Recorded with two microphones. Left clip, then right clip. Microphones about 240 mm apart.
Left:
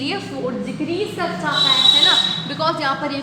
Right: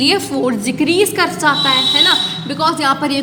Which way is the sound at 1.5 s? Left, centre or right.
Right.